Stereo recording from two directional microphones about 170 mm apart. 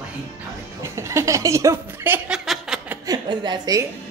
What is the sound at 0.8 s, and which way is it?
Chuckle, 15° right (ahead or behind).